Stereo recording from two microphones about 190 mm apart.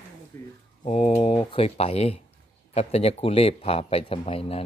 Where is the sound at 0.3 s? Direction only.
15° left (ahead or behind).